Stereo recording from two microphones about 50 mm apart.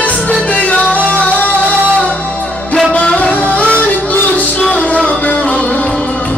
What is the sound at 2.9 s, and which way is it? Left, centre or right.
Music, left.